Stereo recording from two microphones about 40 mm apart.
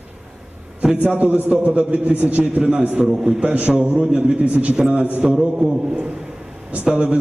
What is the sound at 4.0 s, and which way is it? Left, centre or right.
Speech, right.